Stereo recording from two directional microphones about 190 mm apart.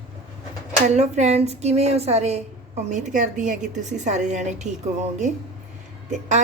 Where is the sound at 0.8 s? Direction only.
35° right (ahead or behind).